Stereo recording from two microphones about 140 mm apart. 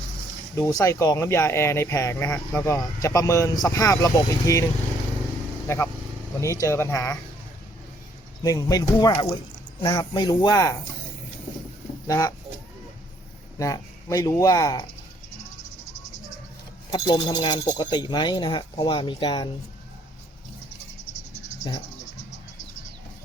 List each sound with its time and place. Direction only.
0.5 s speech: 25° left (ahead or behind)
8.4 s speech: 25° left (ahead or behind)
12.0 s speech: 25° left (ahead or behind)
13.6 s speech: 25° left (ahead or behind)
16.9 s speech: 35° left (ahead or behind)